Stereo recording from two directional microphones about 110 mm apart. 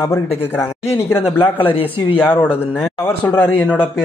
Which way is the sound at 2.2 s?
15° left (ahead or behind).